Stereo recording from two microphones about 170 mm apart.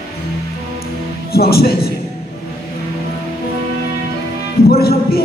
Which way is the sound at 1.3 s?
65° left (ahead or behind).